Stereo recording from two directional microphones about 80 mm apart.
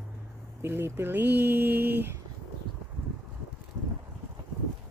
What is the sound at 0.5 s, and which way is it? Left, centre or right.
Speech, right.